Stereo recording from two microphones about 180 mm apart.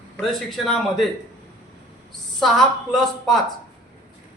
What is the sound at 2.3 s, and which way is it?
A man's voice, centre (ahead or behind).